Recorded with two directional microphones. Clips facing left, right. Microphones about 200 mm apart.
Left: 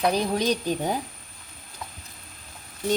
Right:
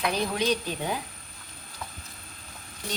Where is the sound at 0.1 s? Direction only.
40° left (ahead or behind).